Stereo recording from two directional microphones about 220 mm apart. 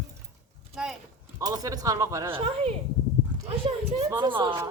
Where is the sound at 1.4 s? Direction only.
15° right (ahead or behind).